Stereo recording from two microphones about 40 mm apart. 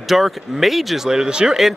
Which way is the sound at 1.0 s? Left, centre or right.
Centre.